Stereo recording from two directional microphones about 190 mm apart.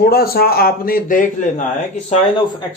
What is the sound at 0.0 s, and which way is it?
Speech, 55° left (ahead or behind).